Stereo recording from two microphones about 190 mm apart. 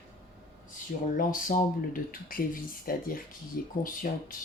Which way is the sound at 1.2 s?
45° left (ahead or behind).